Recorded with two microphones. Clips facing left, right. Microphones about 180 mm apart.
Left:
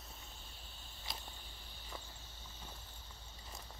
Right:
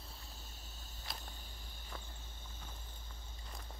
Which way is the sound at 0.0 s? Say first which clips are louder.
Right 1 dB; 35° right (ahead or behind).